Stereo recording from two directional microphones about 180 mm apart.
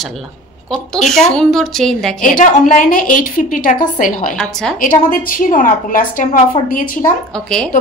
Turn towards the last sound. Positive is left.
turn(degrees=5)  # may be behind; listen again after turning